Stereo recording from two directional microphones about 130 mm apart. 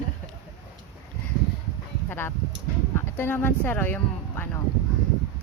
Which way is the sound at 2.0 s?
15° left (ahead or behind).